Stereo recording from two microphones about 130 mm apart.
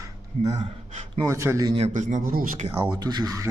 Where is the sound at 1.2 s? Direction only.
20° right (ahead or behind).